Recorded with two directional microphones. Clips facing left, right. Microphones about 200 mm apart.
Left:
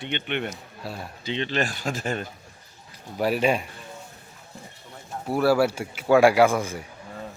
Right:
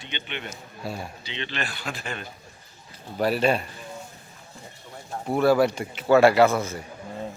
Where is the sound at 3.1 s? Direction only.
10° left (ahead or behind).